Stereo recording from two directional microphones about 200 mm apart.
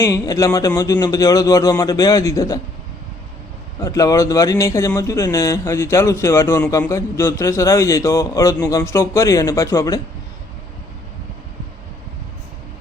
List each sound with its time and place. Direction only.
0.0 s speech: 15° left (ahead or behind)
3.8 s speech: 15° left (ahead or behind)